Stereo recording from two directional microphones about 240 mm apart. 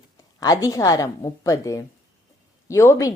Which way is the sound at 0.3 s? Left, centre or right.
Centre.